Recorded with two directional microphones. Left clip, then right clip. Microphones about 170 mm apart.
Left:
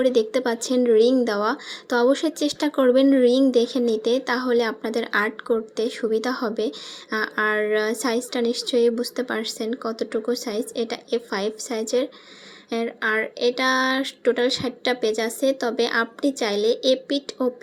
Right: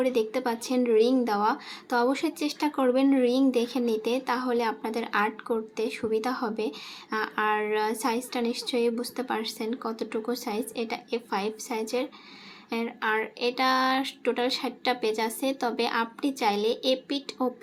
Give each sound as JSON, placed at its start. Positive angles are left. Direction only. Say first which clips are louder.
{"t": 0.0, "sound": "speech", "louder": "left 6 dB", "side_deg": 25}